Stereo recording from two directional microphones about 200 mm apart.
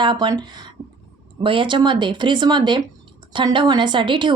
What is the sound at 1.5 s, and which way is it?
A woman's voice, 25° right (ahead or behind).